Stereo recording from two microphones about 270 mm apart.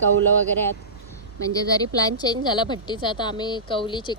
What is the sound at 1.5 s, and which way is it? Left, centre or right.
Speech, centre.